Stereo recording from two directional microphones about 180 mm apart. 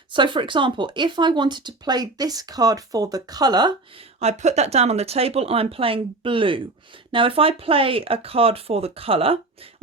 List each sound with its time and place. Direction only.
0.1 s speech: 25° right (ahead or behind)
4.2 s speech: 35° right (ahead or behind)